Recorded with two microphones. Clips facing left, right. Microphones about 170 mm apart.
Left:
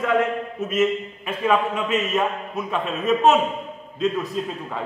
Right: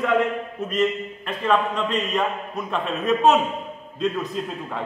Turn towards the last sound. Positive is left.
turn(degrees=0)  # may be behind; listen again after turning